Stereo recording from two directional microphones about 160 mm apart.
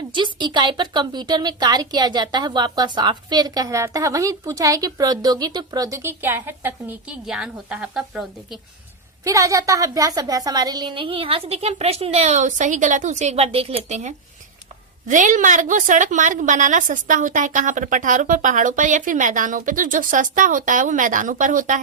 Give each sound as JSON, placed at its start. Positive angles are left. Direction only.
{"t": 0.1, "sound": "speech", "side_deg": -30}
{"t": 9.2, "sound": "a woman's voice", "side_deg": -20}